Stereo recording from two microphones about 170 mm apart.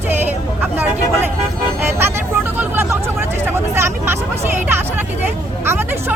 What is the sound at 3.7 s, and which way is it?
Hubbub, 15° right (ahead or behind).